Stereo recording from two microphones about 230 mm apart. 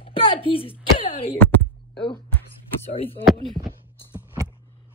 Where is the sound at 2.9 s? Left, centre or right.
Left.